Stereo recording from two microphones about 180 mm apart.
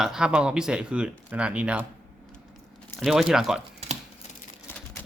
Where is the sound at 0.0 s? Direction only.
5° right (ahead or behind).